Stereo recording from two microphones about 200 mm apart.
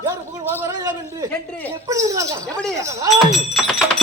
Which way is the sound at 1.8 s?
15° right (ahead or behind).